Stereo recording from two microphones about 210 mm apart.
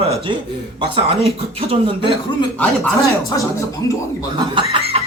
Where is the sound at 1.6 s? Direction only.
25° right (ahead or behind).